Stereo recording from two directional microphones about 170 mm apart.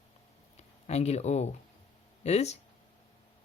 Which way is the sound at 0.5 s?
40° left (ahead or behind).